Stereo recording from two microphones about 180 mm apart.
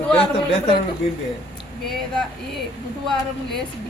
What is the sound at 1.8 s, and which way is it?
Speech, centre (ahead or behind).